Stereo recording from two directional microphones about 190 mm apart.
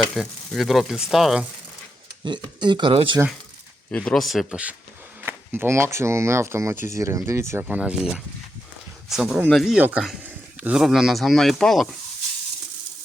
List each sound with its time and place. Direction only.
0.0 s speech: centre (ahead or behind)
2.2 s speech: 25° right (ahead or behind)
3.9 s speech: 5° left (ahead or behind)